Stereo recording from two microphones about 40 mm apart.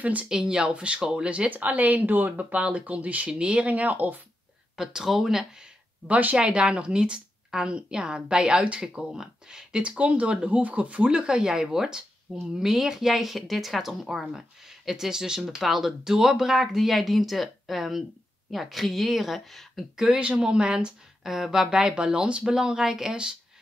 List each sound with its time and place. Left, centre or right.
0.0 s speech: right
0.3 s a woman's voice: centre
1.5 s speech: right
3.3 s speech: right
4.7 s speech: centre
6.0 s speech: right
6.3 s a woman's voice: right
9.8 s a woman's voice: right; by 19.8 s centre
20.2 s speech: right
20.4 s a woman's voice: centre
21.2 s speech: centre